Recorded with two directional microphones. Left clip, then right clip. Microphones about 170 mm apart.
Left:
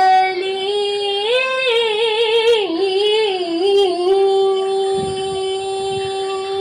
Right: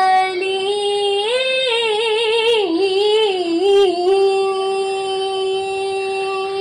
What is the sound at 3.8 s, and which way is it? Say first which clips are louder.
Music: even; 20° left (ahead or behind).